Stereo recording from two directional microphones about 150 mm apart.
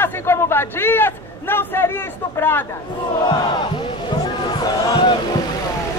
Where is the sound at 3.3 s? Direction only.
30° left (ahead or behind).